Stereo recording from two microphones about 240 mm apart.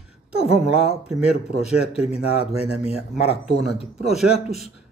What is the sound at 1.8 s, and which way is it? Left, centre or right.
Speech, left.